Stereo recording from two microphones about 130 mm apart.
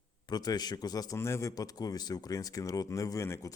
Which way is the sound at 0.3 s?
30° left (ahead or behind).